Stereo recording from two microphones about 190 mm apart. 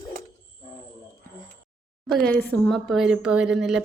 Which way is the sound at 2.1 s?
5° left (ahead or behind).